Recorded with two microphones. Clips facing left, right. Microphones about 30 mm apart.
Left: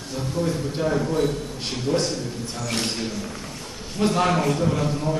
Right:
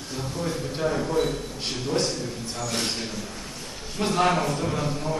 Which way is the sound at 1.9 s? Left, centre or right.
Left.